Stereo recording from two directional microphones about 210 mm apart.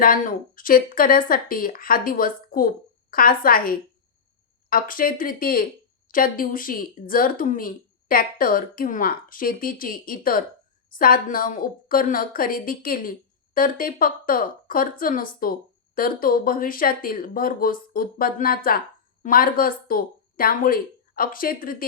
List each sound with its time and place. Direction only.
0.0 s a woman's voice: 40° left (ahead or behind)